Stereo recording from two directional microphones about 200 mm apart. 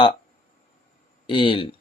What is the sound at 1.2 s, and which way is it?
Speech, 25° left (ahead or behind).